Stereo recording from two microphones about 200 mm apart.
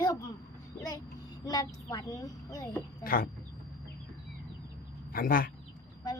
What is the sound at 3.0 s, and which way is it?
Speech, 45° left (ahead or behind).